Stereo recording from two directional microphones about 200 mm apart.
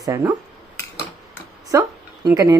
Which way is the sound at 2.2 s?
15° right (ahead or behind).